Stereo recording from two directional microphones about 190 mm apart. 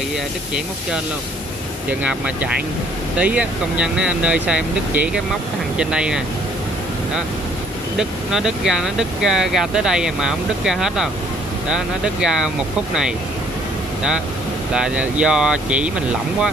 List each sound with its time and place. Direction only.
1.9 s speech: 5° right (ahead or behind)
8.0 s speech: 5° right (ahead or behind)
14.7 s speech: 5° right (ahead or behind)